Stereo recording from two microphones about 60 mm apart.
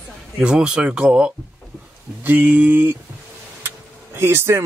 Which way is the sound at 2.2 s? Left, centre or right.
Right.